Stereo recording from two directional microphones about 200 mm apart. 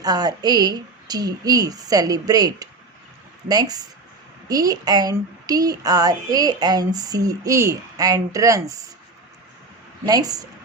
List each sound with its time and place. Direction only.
0.0 s speech: 20° right (ahead or behind)
10.1 s speech: 20° right (ahead or behind)